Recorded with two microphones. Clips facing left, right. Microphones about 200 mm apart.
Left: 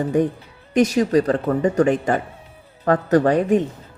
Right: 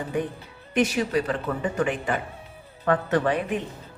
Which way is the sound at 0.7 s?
40° left (ahead or behind).